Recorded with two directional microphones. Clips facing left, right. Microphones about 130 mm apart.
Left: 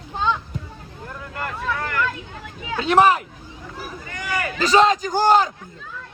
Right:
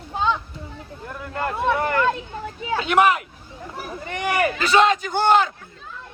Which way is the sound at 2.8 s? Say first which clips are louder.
Left 2 dB; 35° left (ahead or behind).